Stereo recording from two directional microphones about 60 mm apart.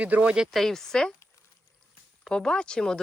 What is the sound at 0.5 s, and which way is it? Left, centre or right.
Speech, centre.